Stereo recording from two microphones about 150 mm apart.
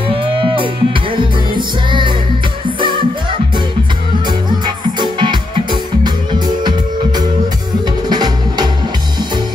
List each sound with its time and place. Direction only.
0.4 s music: 35° right (ahead or behind)
1.9 s music: 30° right (ahead or behind)
8.1 s music: 30° right (ahead or behind)